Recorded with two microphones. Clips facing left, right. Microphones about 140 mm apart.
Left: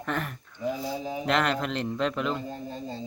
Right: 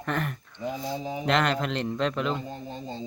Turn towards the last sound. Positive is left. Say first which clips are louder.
# left 1 dB
turn(degrees=-25)  # may be behind; listen again after turning